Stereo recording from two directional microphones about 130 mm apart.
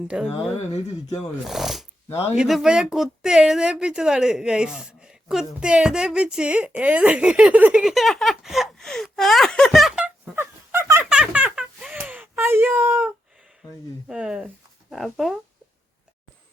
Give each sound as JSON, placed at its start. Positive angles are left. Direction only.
{"t": 0.1, "sound": "speech", "side_deg": -10}
{"t": 1.5, "sound": "speech", "side_deg": 0}
{"t": 10.3, "sound": "fowl", "side_deg": -15}
{"t": 11.1, "sound": "a sound", "side_deg": -10}
{"t": 14.1, "sound": "speech", "side_deg": -5}